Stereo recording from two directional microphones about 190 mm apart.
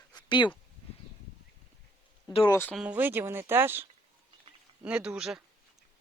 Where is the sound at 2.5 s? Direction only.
10° left (ahead or behind).